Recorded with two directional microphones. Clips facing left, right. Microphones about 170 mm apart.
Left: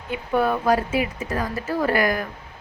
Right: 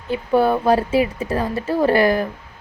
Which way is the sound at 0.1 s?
30° right (ahead or behind).